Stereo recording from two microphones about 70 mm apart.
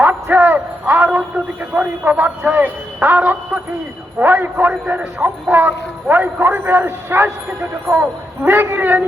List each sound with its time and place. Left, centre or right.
0.0 s a man's voice: right